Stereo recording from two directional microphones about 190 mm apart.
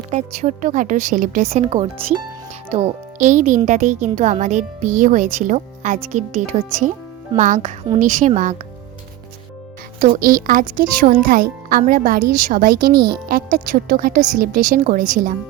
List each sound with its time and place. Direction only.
0.1 s speech: 40° right (ahead or behind)
10.0 s speech: 45° right (ahead or behind)